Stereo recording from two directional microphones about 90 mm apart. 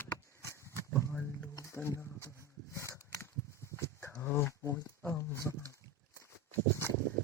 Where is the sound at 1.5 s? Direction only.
35° left (ahead or behind).